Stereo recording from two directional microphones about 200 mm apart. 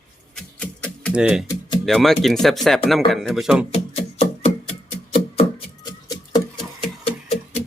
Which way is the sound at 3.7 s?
30° left (ahead or behind).